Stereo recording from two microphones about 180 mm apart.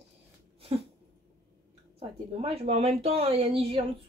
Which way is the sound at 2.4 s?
35° right (ahead or behind).